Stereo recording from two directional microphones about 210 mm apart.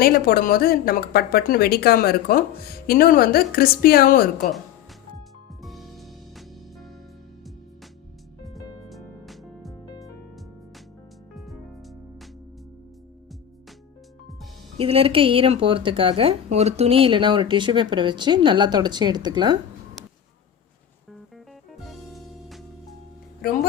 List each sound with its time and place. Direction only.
0.0 s speech: 45° left (ahead or behind)
5.6 s music: centre (ahead or behind)
8.9 s music: centre (ahead or behind)
11.3 s music: centre (ahead or behind)
14.8 s speech: 25° right (ahead or behind)
21.7 s music: centre (ahead or behind)